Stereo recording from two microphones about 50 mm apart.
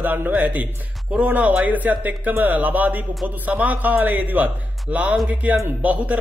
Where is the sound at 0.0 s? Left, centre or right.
Right.